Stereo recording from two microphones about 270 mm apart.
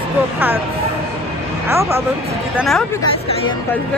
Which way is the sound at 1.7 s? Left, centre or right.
Centre.